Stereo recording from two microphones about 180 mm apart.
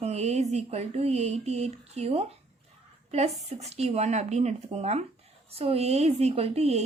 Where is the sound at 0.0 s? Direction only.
35° right (ahead or behind).